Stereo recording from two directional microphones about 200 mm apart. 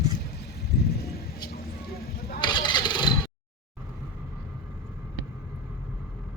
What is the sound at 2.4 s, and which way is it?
Vehicle, 20° left (ahead or behind).